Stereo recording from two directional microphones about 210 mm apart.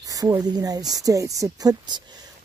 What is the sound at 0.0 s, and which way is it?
Speech, 15° right (ahead or behind).